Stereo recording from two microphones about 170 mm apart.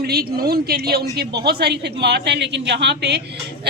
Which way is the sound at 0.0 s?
65° right (ahead or behind).